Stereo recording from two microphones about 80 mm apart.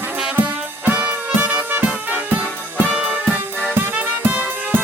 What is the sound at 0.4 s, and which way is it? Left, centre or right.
Music, right.